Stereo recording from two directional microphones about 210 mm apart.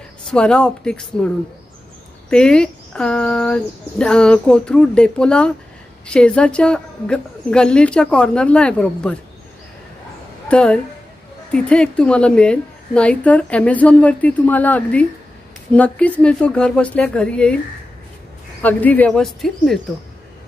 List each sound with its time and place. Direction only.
0.3 s a woman's voice: 5° left (ahead or behind)
10.5 s a woman's voice: 5° left (ahead or behind)
18.6 s a woman's voice: 10° left (ahead or behind)